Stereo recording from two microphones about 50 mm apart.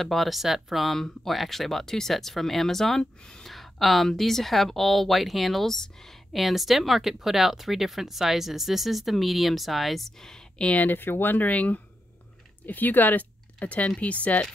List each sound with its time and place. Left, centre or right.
0.0 s speech: centre
3.4 s speech: centre
10.6 s speech: left
10.9 s speech: left